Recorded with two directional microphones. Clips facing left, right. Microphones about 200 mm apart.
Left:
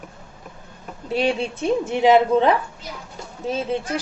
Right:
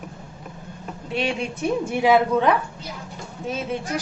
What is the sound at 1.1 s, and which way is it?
Speech, 35° left (ahead or behind).